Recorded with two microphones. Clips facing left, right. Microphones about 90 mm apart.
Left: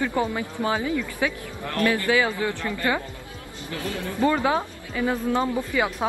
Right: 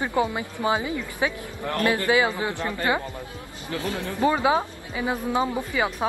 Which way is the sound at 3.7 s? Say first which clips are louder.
Right 2 dB; 25° right (ahead or behind).